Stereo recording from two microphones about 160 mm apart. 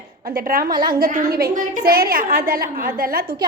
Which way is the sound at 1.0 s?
65° right (ahead or behind).